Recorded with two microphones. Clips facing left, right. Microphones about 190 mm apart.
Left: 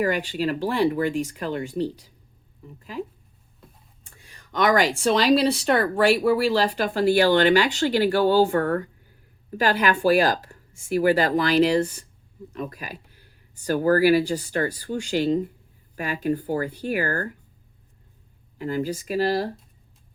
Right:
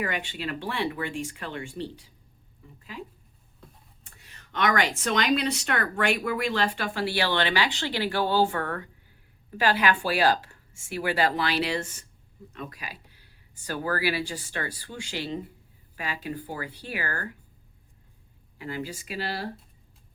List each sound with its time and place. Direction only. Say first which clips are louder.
0.0 s speech: left 8 dB; 40° left (ahead or behind)
4.2 s speech: left 5 dB; 35° left (ahead or behind)
18.6 s speech: left 8 dB; 45° left (ahead or behind)